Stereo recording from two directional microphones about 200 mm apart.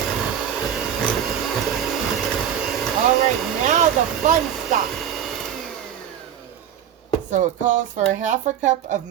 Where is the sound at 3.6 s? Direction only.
35° right (ahead or behind).